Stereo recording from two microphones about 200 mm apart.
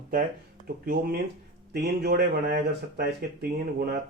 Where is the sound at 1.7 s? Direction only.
55° right (ahead or behind).